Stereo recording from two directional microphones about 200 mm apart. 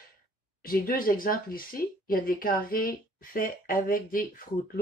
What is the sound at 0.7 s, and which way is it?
Speech, 45° left (ahead or behind).